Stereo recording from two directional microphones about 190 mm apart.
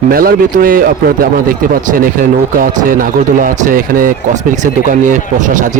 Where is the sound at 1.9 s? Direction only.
50° right (ahead or behind).